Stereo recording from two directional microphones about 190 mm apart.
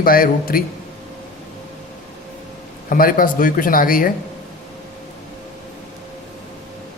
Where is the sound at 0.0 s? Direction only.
50° left (ahead or behind).